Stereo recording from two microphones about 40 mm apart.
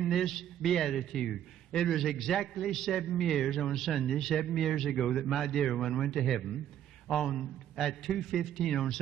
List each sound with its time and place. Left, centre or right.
0.0 s a man's voice: centre